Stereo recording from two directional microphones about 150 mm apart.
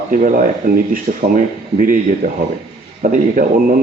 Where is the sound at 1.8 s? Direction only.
65° right (ahead or behind).